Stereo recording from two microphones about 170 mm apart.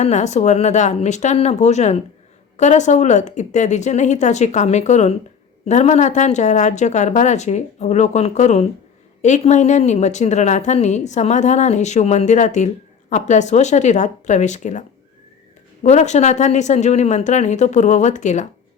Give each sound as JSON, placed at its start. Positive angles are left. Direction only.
{"t": 0.0, "sound": "speech", "side_deg": 40}